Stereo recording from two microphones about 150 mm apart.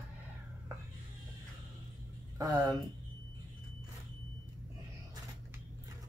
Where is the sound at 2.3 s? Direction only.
25° right (ahead or behind).